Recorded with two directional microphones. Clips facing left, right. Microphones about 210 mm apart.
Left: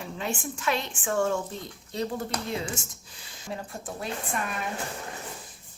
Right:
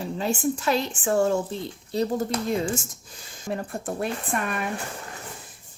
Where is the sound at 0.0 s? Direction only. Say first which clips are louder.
Right 7 dB; 35° right (ahead or behind); by 4.1 s 60° right (ahead or behind).